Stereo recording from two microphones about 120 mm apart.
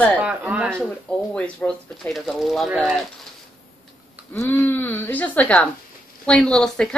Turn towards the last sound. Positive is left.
turn(degrees=5)  # may be behind; listen again after turning